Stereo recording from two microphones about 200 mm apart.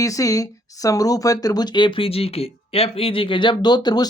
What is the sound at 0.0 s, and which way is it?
Speech, 15° left (ahead or behind).